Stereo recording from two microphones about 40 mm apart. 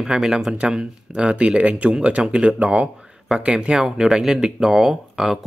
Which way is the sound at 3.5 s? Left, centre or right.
Centre.